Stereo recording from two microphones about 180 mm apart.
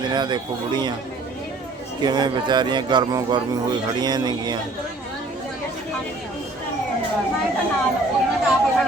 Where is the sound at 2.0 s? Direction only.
25° right (ahead or behind).